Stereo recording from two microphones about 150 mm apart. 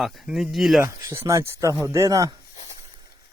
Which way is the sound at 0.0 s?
Centre (ahead or behind).